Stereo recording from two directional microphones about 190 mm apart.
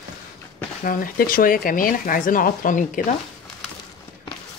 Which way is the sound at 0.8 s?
45° left (ahead or behind).